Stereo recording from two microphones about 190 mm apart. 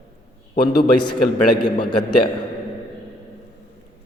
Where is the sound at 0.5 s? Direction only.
55° left (ahead or behind).